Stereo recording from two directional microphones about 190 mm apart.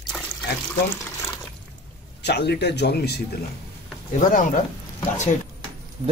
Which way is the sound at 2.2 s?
60° left (ahead or behind).